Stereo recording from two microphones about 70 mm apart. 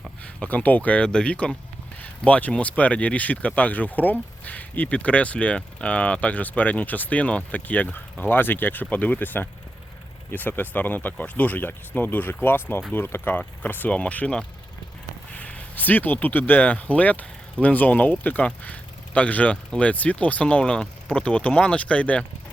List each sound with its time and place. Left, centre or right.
0.3 s speech: left
15.4 s speech: left